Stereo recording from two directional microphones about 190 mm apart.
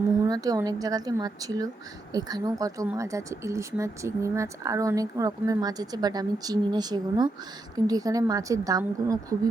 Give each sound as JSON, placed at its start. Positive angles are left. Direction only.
{"t": 0.3, "sound": "a woman's voice", "side_deg": -20}